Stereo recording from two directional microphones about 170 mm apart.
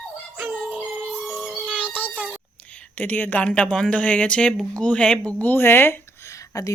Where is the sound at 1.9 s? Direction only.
10° left (ahead or behind).